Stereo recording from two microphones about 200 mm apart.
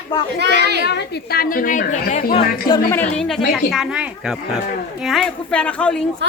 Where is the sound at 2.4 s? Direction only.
45° left (ahead or behind).